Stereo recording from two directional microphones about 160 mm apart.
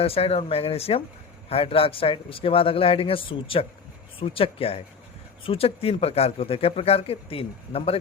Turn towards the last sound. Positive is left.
turn(degrees=40)  # may be behind; listen again after turning